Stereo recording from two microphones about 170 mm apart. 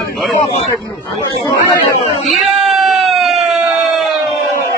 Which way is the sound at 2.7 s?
Centre (ahead or behind).